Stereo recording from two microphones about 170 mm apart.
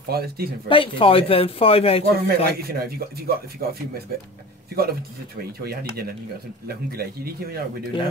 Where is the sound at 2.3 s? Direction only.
65° right (ahead or behind).